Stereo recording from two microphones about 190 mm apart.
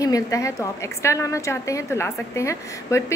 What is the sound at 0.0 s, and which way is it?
A woman's voice, 15° left (ahead or behind).